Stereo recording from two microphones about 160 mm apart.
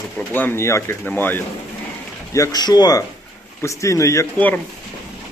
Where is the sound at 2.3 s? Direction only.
20° left (ahead or behind).